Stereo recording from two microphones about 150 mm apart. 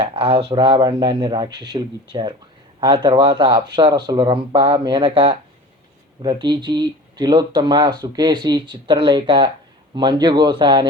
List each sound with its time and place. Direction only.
0.0 s speech: 35° right (ahead or behind)